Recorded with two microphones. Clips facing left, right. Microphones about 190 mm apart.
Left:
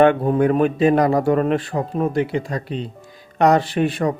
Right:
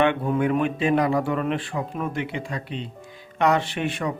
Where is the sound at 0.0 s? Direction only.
40° left (ahead or behind).